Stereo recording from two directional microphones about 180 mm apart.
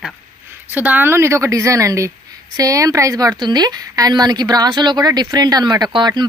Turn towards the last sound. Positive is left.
turn(degrees=-25)  # may be behind; listen again after turning